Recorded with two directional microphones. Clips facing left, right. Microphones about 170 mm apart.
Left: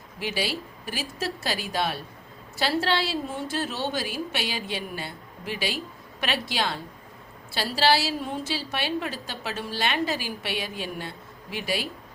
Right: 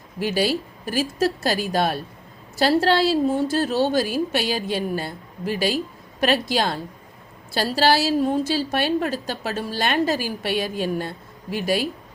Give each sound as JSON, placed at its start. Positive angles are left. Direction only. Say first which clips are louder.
{"t": 0.2, "sound": "a woman's voice", "louder": "right 8 dB", "side_deg": -45}